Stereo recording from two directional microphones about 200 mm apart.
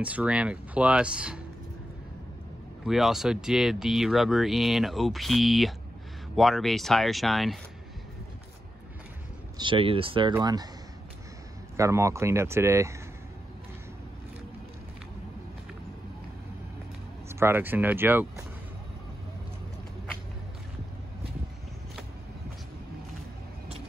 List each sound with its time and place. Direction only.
0.0 s speech: 5° right (ahead or behind)
2.8 s speech: centre (ahead or behind)
9.6 s speech: 25° right (ahead or behind)
11.7 s speech: 15° right (ahead or behind)
17.3 s speech: 10° right (ahead or behind)